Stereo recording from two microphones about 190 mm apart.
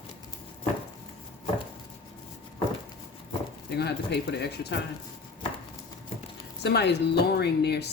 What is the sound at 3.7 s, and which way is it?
Speech, 60° left (ahead or behind).